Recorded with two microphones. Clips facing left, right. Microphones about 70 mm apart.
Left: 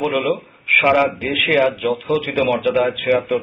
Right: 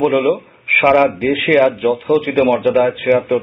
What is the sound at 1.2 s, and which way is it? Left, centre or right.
Speech, right.